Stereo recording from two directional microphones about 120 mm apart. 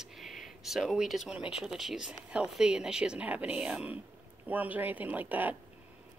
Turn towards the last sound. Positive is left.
turn(degrees=-15)  # may be behind; listen again after turning